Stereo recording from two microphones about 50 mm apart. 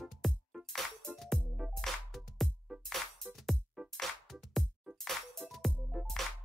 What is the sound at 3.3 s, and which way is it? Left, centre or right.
Music, centre.